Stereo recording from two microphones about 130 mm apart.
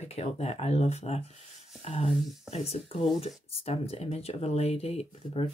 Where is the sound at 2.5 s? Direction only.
55° left (ahead or behind).